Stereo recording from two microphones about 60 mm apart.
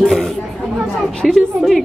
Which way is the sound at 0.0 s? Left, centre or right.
Centre.